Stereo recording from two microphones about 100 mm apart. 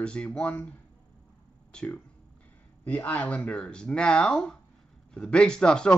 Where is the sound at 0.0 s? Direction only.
10° left (ahead or behind).